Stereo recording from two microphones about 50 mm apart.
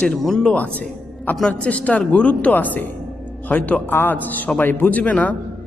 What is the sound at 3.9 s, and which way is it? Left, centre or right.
A woman's voice, left.